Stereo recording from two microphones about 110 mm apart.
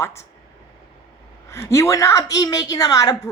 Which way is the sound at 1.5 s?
25° left (ahead or behind).